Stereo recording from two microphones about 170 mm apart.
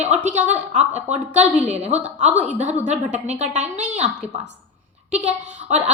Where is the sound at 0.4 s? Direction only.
45° right (ahead or behind).